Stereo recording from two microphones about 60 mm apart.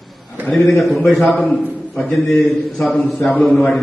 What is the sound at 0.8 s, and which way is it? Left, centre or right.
Speech, centre.